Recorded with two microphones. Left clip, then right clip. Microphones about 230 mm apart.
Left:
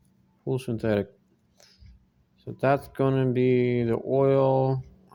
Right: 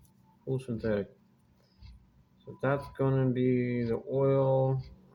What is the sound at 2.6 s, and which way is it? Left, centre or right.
Speech, left.